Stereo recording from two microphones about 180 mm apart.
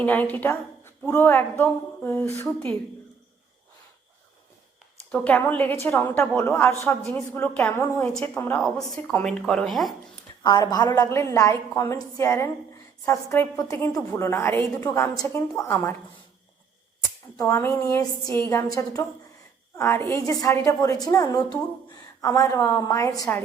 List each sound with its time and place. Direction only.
0.0 s a woman's voice: 10° left (ahead or behind)
5.1 s a woman's voice: 10° left (ahead or behind)
10.4 s a woman's voice: 20° left (ahead or behind)
17.3 s a woman's voice: 15° left (ahead or behind)